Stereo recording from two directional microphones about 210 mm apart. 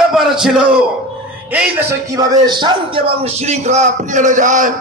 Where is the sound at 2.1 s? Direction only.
20° right (ahead or behind); by 4.7 s 35° right (ahead or behind).